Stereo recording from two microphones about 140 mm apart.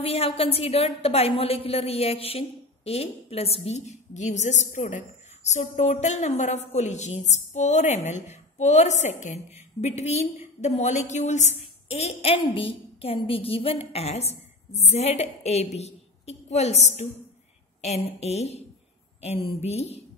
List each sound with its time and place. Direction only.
0.0 s a woman's voice: 45° left (ahead or behind)
18.2 s a woman's voice: 50° left (ahead or behind)